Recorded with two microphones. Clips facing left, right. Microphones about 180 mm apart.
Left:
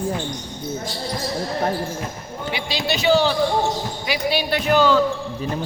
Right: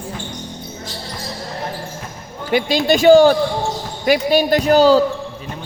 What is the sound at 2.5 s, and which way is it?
A man's voice, 45° right (ahead or behind).